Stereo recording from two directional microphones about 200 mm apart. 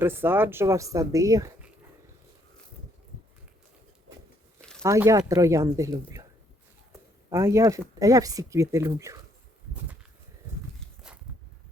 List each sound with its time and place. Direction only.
0.0 s speech: 10° right (ahead or behind)
4.8 s speech: 15° right (ahead or behind)
7.3 s speech: 15° right (ahead or behind)